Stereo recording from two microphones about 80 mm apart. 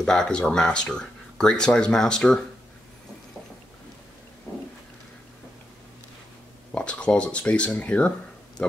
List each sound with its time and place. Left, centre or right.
0.0 s speech: centre
6.7 s speech: centre